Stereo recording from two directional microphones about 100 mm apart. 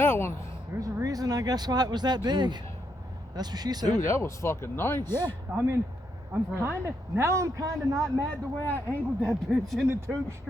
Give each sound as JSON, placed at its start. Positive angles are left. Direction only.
{"t": 0.0, "sound": "speech", "side_deg": 25}
{"t": 0.7, "sound": "a man's voice", "side_deg": -30}
{"t": 1.0, "sound": "speech", "side_deg": -40}
{"t": 4.1, "sound": "speech", "side_deg": 30}
{"t": 5.5, "sound": "a man's voice", "side_deg": -25}
{"t": 8.3, "sound": "speech", "side_deg": 15}
{"t": 9.3, "sound": "speech", "side_deg": 5}
{"t": 9.9, "sound": "a man's voice", "side_deg": -25}